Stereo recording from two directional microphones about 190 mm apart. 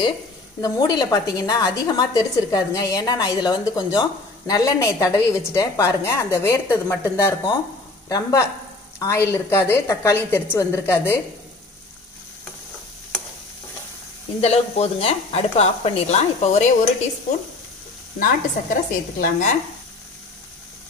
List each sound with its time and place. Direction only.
0.6 s a woman's voice: 20° left (ahead or behind)
14.4 s speech: 35° left (ahead or behind)
18.2 s speech: 45° left (ahead or behind)